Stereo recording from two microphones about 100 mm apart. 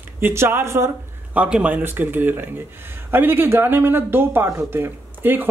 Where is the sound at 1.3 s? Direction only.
10° right (ahead or behind).